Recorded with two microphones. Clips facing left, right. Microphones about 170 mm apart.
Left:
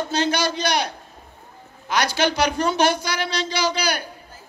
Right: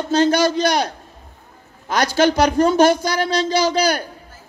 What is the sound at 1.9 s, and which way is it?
A woman's voice, 45° right (ahead or behind).